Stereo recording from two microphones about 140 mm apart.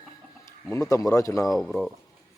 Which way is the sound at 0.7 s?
25° left (ahead or behind).